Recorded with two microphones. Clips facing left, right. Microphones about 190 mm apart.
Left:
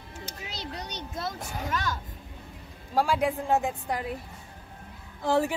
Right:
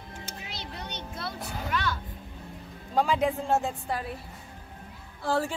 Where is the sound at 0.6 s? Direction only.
40° left (ahead or behind).